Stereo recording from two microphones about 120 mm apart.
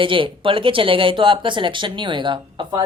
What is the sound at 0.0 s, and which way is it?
Speech, 45° right (ahead or behind).